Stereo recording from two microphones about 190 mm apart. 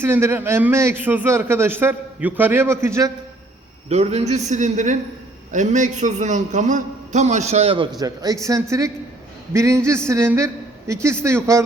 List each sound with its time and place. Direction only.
0.0 s a man's voice: 10° right (ahead or behind)
3.8 s a man's voice: 35° right (ahead or behind); by 11.6 s 15° right (ahead or behind)